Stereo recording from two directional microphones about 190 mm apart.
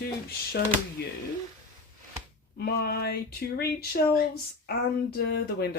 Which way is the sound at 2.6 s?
55° left (ahead or behind).